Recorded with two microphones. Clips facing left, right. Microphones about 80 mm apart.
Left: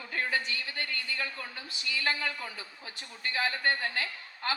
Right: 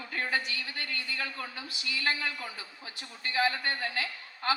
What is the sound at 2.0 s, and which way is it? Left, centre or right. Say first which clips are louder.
A man's voice: even; left.